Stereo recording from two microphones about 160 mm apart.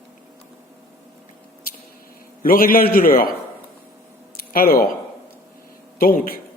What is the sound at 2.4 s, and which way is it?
Speech, 65° left (ahead or behind).